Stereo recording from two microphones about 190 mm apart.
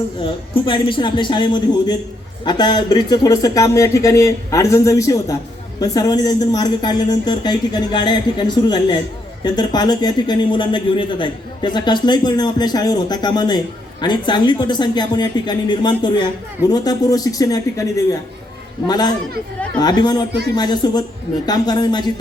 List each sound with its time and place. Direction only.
0.2 s a man's voice: 25° left (ahead or behind)